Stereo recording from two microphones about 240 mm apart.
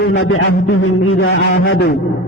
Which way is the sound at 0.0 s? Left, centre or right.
Left.